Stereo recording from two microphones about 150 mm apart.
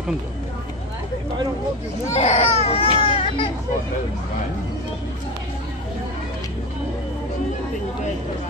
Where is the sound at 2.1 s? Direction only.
45° left (ahead or behind).